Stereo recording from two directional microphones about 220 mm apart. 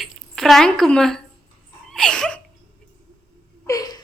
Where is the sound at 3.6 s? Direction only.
15° left (ahead or behind).